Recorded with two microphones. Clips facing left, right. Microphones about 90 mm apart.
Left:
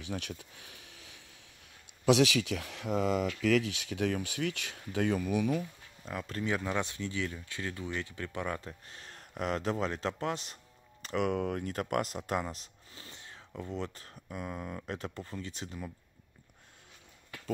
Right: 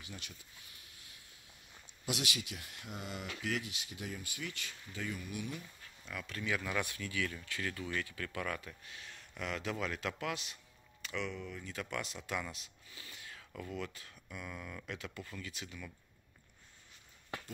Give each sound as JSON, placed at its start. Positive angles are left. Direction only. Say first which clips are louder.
{"t": 0.1, "sound": "speech", "louder": "left 15 dB", "side_deg": 75}
{"t": 2.0, "sound": "speech", "louder": "left 14 dB", "side_deg": 90}
{"t": 6.0, "sound": "speech", "louder": "left 5 dB", "side_deg": 40}
{"t": 11.2, "sound": "speech", "louder": "left 12 dB", "side_deg": 70}
{"t": 11.6, "sound": "speech", "louder": "left 9 dB", "side_deg": 50}